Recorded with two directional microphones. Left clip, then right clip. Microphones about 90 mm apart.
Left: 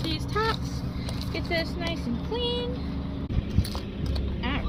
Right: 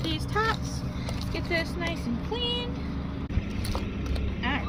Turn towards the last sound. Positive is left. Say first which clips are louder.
# right 2 dB
turn(degrees=-30)  # may be behind; listen again after turning